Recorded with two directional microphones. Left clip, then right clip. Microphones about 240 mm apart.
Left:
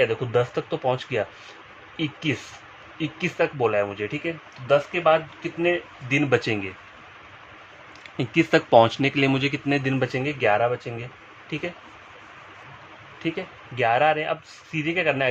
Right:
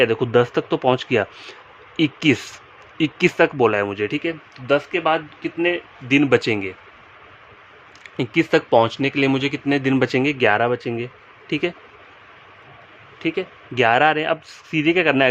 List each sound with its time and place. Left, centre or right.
0.0 s speech: right; by 6.7 s centre
8.1 s speech: centre; by 11.7 s right
13.2 s speech: right